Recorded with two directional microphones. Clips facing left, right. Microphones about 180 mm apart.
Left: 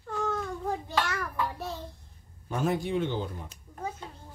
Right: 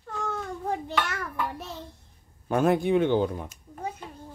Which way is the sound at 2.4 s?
60° right (ahead or behind).